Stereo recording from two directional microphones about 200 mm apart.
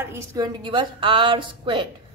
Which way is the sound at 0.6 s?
25° right (ahead or behind).